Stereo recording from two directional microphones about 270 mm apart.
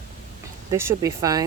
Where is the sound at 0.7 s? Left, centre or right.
Centre.